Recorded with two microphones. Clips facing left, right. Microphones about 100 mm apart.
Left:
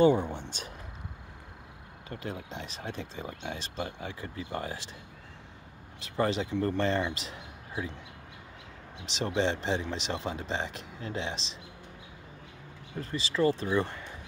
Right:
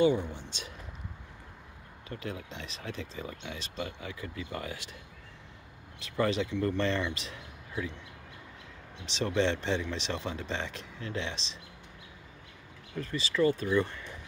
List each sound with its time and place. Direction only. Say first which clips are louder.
0.0 s speech: left 3 dB; 50° left (ahead or behind)
2.0 s speech: left 1 dB; 30° left (ahead or behind)
6.0 s speech: even; 30° left (ahead or behind)
9.2 s speech: even; 30° left (ahead or behind)
13.0 s speech: even; 30° left (ahead or behind)